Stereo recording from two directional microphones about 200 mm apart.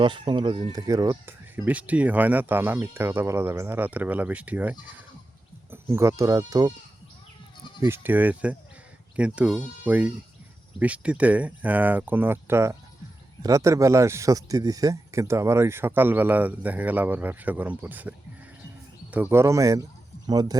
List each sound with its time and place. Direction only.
0.0 s speech: 25° right (ahead or behind)
7.8 s speech: 10° right (ahead or behind)
19.1 s speech: 10° right (ahead or behind)